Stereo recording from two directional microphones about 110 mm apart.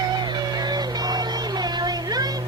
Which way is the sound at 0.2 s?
40° right (ahead or behind).